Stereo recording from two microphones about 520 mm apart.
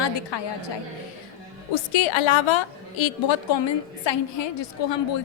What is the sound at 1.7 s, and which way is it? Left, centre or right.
A woman's voice, left.